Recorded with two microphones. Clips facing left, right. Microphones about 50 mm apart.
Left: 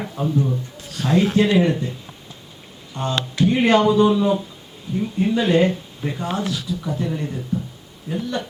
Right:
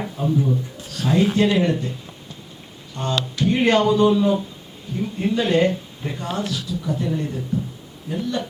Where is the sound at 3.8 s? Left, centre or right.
Centre.